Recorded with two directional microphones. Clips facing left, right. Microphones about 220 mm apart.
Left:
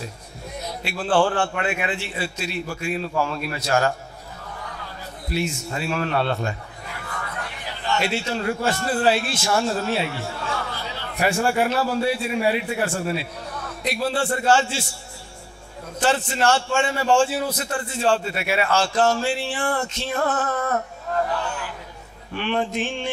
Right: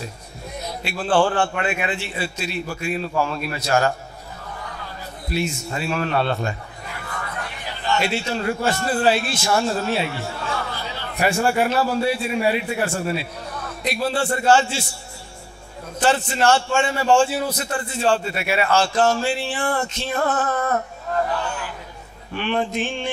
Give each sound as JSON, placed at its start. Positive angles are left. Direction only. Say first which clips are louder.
{"t": 0.8, "sound": "a man's voice", "louder": "right 1 dB", "side_deg": -15}
{"t": 5.7, "sound": "a man's voice", "louder": "right 1 dB", "side_deg": -15}
{"t": 16.0, "sound": "a man's voice", "louder": "right 2 dB", "side_deg": -10}
{"t": 20.2, "sound": "a sound", "louder": "right 2 dB", "side_deg": -25}
{"t": 22.3, "sound": "a man's voice", "louder": "right 1 dB", "side_deg": -15}